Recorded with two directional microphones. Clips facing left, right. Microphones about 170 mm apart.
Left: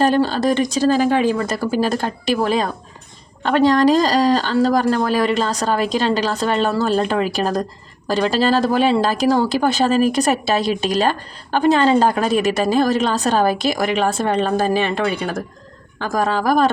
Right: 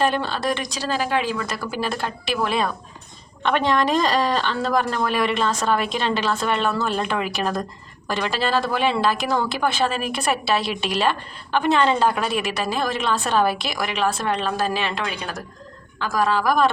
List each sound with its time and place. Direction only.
0.0 s speech: 40° left (ahead or behind)